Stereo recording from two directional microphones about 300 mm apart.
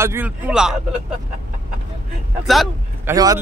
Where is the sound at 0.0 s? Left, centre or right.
Centre.